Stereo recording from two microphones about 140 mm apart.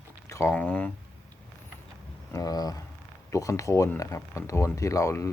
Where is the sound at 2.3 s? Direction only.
25° left (ahead or behind).